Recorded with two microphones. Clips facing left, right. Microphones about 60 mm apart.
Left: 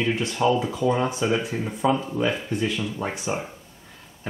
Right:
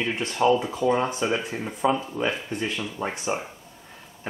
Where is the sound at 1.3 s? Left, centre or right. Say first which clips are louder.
Left 3 dB; centre.